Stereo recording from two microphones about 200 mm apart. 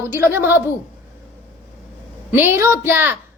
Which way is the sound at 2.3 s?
10° right (ahead or behind).